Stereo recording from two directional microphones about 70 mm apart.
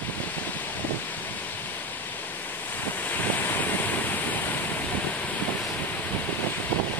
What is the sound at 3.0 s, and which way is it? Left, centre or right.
Waves, left.